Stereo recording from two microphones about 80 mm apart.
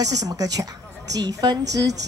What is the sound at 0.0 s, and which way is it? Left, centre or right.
A child's voice, right.